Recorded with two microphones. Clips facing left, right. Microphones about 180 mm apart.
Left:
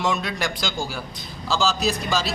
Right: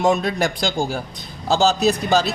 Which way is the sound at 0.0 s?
50° right (ahead or behind).